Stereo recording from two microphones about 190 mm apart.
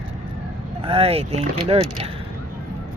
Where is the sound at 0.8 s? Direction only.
30° right (ahead or behind).